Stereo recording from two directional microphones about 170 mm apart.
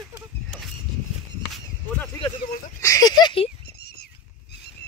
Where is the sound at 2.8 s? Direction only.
20° left (ahead or behind).